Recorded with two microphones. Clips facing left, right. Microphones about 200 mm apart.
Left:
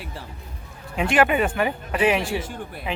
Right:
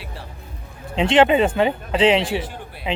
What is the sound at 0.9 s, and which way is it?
Speech, 25° right (ahead or behind).